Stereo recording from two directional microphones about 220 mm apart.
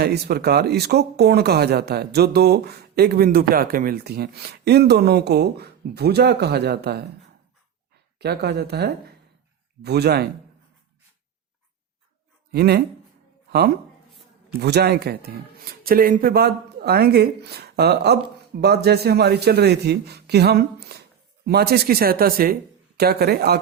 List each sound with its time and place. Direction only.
0.0 s speech: 45° right (ahead or behind)
8.2 s speech: 45° right (ahead or behind)
12.5 s speech: 45° right (ahead or behind)
14.6 s speech: 45° right (ahead or behind)